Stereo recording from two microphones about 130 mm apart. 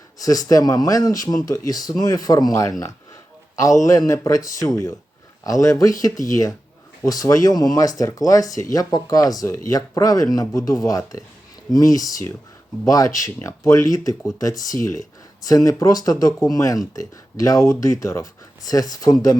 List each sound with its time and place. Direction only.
0.2 s speech: 30° left (ahead or behind)